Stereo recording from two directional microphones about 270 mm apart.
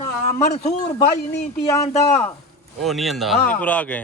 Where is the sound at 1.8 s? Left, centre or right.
Left.